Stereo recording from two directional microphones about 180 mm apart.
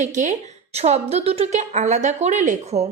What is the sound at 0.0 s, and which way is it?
A woman's voice, 45° right (ahead or behind).